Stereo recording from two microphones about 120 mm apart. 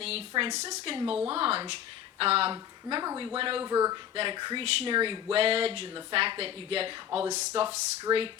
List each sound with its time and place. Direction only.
0.0 s a sound: 55° right (ahead or behind)
0.5 s a woman's voice: 70° right (ahead or behind)
1.3 s speech: 50° right (ahead or behind); by 3.3 s 35° right (ahead or behind)
3.3 s speech: 50° right (ahead or behind)
3.6 s speech: 30° right (ahead or behind)
4.1 s speech: 45° right (ahead or behind)
8.1 s speech: 20° right (ahead or behind)